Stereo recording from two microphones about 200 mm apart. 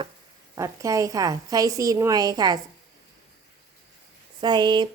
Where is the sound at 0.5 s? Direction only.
15° right (ahead or behind).